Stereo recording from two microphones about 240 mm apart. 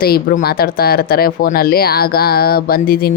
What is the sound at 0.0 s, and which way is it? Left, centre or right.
Speech, left.